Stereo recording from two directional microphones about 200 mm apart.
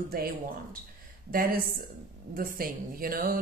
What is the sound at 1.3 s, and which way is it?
Speech, 45° right (ahead or behind).